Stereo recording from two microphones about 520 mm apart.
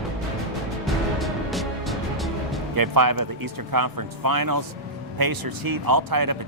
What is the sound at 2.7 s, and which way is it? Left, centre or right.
Speech, right.